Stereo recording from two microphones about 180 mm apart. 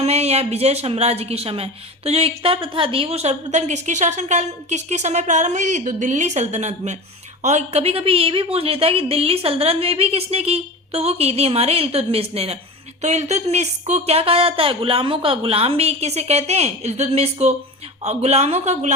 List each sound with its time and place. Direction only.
0.0 s a woman's voice: 35° right (ahead or behind)